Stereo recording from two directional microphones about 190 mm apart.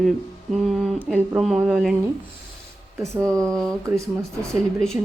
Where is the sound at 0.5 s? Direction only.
Centre (ahead or behind).